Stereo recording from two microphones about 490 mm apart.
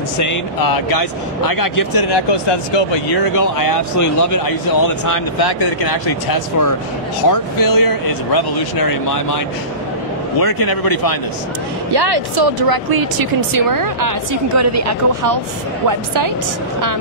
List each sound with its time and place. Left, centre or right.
0.2 s speech: left
3.3 s speech: left
10.4 s speech: left
11.9 s speech: right